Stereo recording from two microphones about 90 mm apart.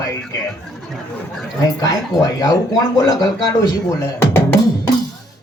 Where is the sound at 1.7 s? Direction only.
45° left (ahead or behind).